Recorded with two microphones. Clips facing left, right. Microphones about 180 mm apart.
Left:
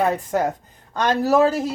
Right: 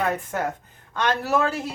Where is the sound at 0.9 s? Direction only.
40° left (ahead or behind).